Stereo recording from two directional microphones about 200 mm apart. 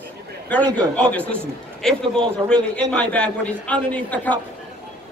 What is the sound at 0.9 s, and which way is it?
A man's voice, 5° left (ahead or behind).